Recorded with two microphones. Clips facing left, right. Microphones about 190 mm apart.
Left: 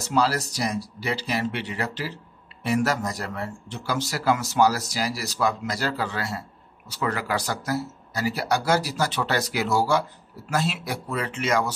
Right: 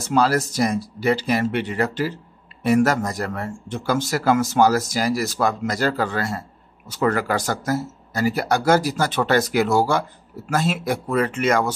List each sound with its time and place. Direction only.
0.1 s speech: 50° right (ahead or behind)